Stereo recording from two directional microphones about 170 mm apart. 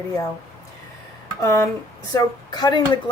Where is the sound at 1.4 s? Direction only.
15° left (ahead or behind).